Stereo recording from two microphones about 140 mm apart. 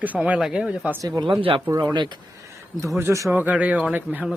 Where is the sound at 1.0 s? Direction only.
30° right (ahead or behind).